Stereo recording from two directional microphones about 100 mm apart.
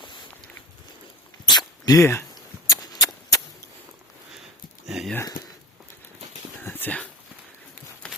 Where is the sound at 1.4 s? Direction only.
40° left (ahead or behind).